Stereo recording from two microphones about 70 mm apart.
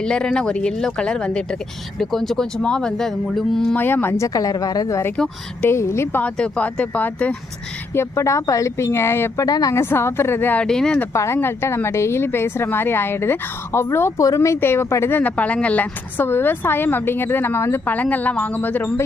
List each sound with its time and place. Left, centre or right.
0.0 s speech: centre
3.8 s a woman's voice: left
4.4 s a woman's voice: left
5.6 s speech: left
6.3 s a woman's voice: centre
7.9 s speech: left
9.5 s a woman's voice: left
9.7 s speech: left
10.7 s speech: centre
11.1 s speech: left
14.2 s speech: left
15.1 s speech: left
17.9 s a woman's voice: left